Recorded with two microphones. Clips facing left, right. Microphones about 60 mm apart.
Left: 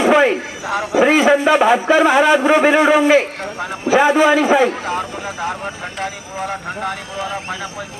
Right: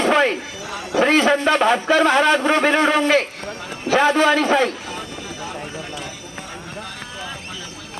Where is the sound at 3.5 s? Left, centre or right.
Left.